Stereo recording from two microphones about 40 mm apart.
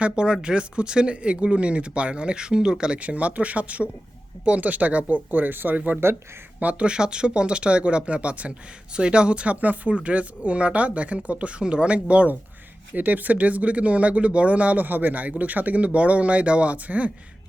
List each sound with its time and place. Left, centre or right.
0.0 s speech: right
3.0 s speech: right
5.3 s speech: right
6.6 s speech: right
6.9 s speech: right
12.9 s speech: right